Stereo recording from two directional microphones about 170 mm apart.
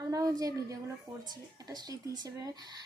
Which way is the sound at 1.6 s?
20° right (ahead or behind).